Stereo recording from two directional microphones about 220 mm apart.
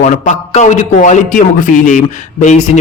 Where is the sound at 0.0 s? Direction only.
30° left (ahead or behind).